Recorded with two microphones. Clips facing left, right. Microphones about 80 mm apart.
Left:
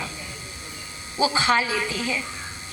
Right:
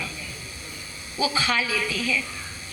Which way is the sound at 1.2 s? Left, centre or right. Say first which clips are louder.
Left 4 dB; left.